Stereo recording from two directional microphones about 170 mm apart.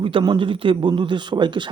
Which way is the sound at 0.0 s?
30° right (ahead or behind).